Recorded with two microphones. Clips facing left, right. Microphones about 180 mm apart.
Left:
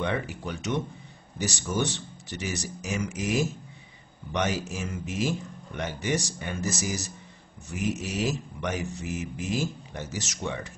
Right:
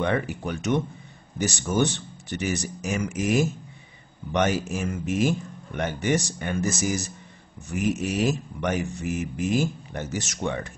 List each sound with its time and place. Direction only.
0.0 s speech: 55° right (ahead or behind)